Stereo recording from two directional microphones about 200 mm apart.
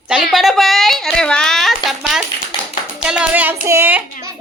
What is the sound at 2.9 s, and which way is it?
Clapping, 5° right (ahead or behind).